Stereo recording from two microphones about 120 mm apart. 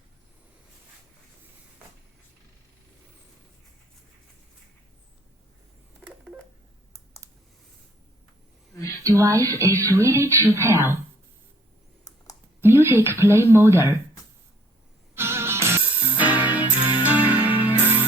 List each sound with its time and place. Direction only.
8.7 s a sound: 25° left (ahead or behind)
9.0 s music: 25° right (ahead or behind)
12.8 s speech: 20° right (ahead or behind)
15.1 s music: 20° right (ahead or behind)